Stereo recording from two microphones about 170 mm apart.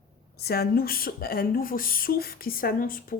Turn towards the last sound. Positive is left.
turn(degrees=55)  # may be behind; listen again after turning